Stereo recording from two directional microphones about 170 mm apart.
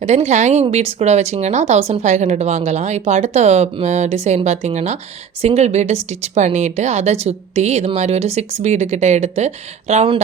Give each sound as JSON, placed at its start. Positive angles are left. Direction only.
{"t": 0.0, "sound": "speech", "side_deg": -40}